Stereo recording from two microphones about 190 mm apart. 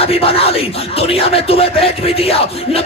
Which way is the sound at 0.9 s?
30° left (ahead or behind).